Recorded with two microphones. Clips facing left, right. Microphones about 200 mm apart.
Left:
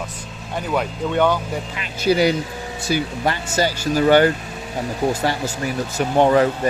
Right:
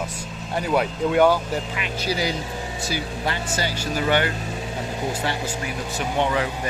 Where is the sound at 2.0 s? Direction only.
60° left (ahead or behind).